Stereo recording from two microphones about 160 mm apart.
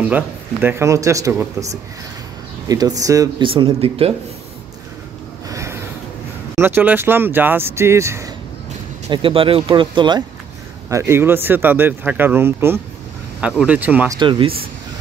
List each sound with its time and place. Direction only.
0.1 s speech: 10° right (ahead or behind); by 4.1 s 35° right (ahead or behind)
5.5 s a sound: 20° right (ahead or behind)
6.5 s speech: 15° right (ahead or behind)
9.1 s speech: 35° right (ahead or behind)
10.9 s speech: 15° right (ahead or behind)
14.1 s speech: 30° right (ahead or behind)